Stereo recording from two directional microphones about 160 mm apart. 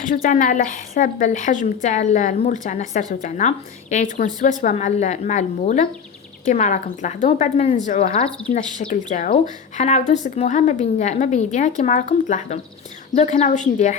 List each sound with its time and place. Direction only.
0.0 s a woman's voice: 60° left (ahead or behind)
13.1 s a woman's voice: 45° left (ahead or behind)